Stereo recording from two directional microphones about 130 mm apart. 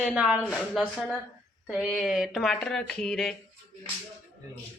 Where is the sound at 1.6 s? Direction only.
5° right (ahead or behind).